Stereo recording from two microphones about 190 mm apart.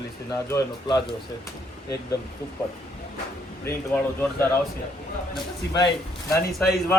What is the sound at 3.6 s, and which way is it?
A man's voice, 10° left (ahead or behind).